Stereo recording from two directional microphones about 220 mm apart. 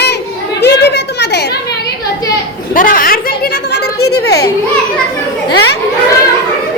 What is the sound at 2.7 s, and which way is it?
A woman's voice, 40° left (ahead or behind).